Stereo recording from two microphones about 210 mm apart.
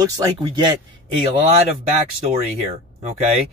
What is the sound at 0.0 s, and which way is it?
Speech, 20° right (ahead or behind).